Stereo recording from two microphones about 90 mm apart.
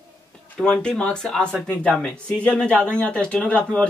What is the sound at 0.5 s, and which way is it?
Speech, 10° left (ahead or behind).